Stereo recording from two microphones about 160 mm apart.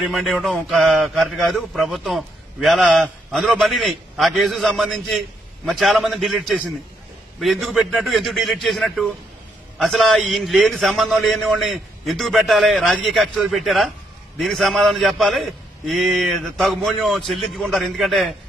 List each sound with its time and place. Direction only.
0.0 s a man's voice: centre (ahead or behind)